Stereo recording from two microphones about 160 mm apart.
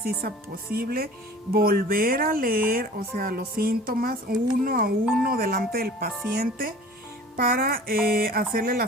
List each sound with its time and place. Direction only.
0.0 s speech: 70° right (ahead or behind)